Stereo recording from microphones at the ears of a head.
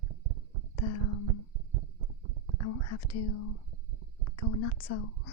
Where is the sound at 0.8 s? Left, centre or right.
Left.